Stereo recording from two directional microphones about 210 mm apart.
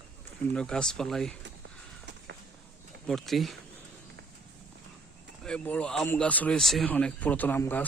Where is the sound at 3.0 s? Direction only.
Centre (ahead or behind).